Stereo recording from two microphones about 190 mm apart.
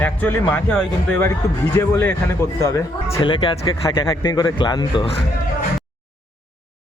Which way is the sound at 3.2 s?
25° left (ahead or behind).